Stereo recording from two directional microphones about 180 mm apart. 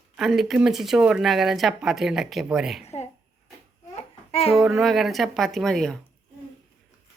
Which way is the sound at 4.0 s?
35° left (ahead or behind).